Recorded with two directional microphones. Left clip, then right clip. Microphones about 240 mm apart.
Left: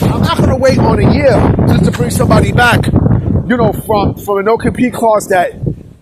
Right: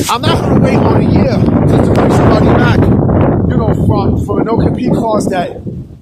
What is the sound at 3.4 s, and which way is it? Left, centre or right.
A man's voice, left.